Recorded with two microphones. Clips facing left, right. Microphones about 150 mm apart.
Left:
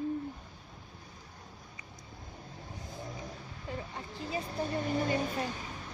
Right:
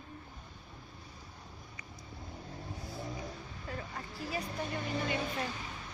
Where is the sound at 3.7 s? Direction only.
20° left (ahead or behind).